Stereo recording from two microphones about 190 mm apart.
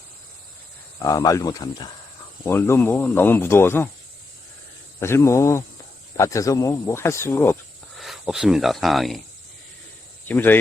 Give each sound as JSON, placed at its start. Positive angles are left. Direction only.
{"t": 1.0, "sound": "speech", "side_deg": 15}
{"t": 4.9, "sound": "speech", "side_deg": 15}
{"t": 7.9, "sound": "speech", "side_deg": 0}
{"t": 10.2, "sound": "speech", "side_deg": 10}